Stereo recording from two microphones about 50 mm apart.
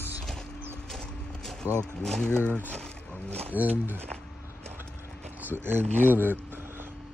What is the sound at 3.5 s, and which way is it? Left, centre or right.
Speech, right.